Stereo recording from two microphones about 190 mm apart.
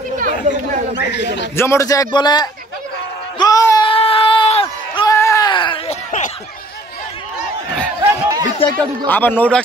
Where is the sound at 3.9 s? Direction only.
30° left (ahead or behind).